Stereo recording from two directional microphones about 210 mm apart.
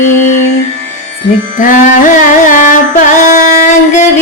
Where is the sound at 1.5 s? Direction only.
40° left (ahead or behind).